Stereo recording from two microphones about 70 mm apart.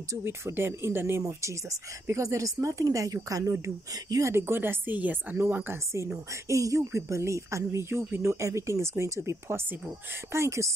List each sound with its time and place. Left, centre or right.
0.2 s a woman's voice: right
1.2 s a woman's voice: right
6.5 s speech: right